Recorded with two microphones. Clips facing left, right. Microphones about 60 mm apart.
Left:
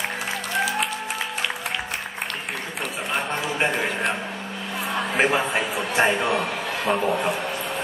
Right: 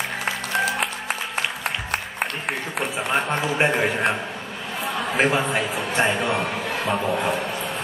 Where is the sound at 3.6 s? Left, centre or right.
Centre.